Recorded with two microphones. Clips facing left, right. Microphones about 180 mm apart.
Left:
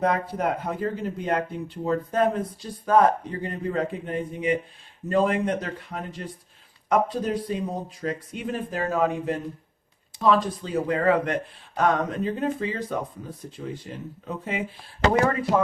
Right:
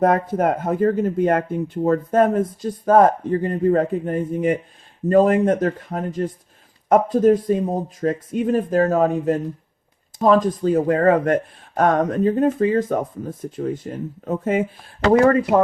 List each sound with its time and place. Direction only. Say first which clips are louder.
0.0 s speech: right 7 dB; 45° right (ahead or behind)